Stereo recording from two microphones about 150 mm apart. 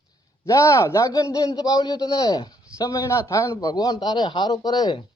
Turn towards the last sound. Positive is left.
turn(degrees=25)  # may be behind; listen again after turning